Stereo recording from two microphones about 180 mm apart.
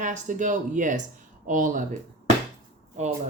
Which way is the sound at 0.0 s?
45° right (ahead or behind).